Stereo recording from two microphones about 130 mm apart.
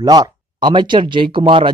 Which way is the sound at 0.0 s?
30° right (ahead or behind).